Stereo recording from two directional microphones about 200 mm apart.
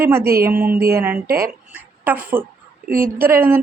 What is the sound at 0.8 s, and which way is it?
Speech, 50° right (ahead or behind).